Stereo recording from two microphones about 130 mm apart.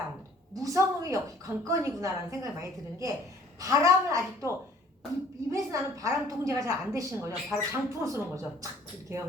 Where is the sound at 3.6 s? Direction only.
25° right (ahead or behind).